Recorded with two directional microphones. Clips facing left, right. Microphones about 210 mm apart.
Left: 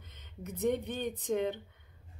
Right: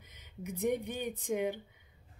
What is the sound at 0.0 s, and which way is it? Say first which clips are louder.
Speech: right 1 dB; 10° right (ahead or behind).